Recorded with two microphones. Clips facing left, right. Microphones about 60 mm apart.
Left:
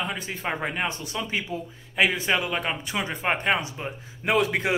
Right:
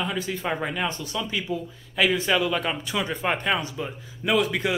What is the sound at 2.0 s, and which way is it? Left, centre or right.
A man's voice, left.